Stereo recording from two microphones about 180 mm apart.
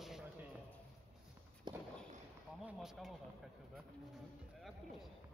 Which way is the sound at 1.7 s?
25° right (ahead or behind).